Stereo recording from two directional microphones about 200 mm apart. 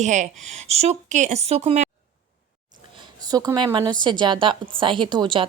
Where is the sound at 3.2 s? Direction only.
20° right (ahead or behind).